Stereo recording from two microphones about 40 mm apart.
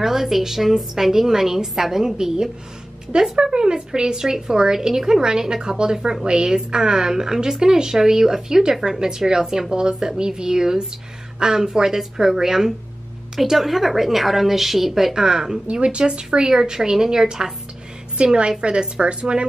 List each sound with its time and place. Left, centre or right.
0.0 s a woman's voice: centre
15.6 s a woman's voice: right